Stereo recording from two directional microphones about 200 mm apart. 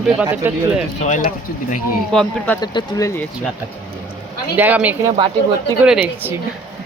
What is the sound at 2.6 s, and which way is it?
Speech, 20° left (ahead or behind).